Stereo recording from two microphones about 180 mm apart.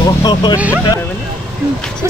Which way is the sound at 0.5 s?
10° right (ahead or behind).